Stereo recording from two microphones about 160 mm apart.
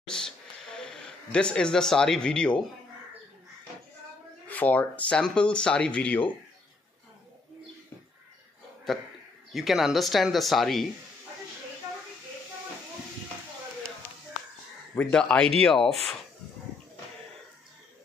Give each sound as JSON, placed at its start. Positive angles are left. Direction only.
{"t": 0.0, "sound": "a sound", "side_deg": 5}
{"t": 4.5, "sound": "speech", "side_deg": 10}
{"t": 8.9, "sound": "speech", "side_deg": 0}
{"t": 15.0, "sound": "speech", "side_deg": 5}